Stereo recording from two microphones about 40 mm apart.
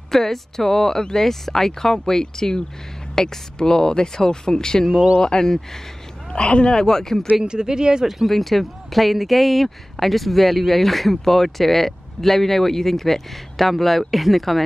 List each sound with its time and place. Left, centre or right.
0.1 s speech: centre
6.3 s speech: left
7.4 s speech: right
8.3 s speech: centre